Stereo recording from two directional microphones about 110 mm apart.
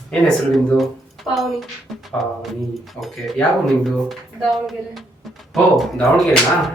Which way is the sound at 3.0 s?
20° left (ahead or behind).